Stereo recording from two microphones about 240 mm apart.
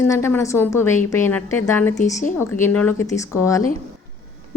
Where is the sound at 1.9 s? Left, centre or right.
Left.